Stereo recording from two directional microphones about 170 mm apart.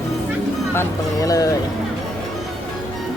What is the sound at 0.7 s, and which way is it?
Speech, 20° left (ahead or behind).